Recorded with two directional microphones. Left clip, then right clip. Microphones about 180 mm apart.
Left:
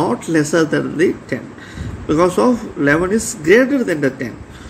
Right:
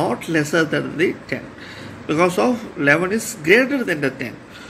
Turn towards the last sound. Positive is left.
turn(degrees=15)  # may be behind; listen again after turning